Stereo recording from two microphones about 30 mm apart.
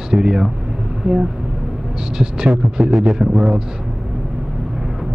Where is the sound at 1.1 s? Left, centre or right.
Right.